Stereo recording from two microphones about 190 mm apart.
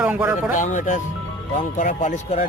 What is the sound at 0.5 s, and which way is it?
Speech, 40° left (ahead or behind).